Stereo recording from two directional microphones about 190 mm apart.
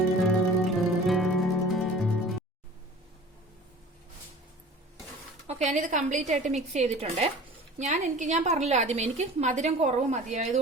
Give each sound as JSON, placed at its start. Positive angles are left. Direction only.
{"t": 0.2, "sound": "music", "side_deg": 0}
{"t": 5.5, "sound": "a woman's voice", "side_deg": -35}